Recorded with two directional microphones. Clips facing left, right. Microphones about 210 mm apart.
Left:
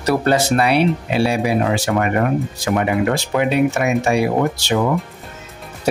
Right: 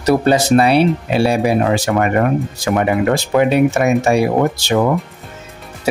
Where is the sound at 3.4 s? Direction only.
45° right (ahead or behind).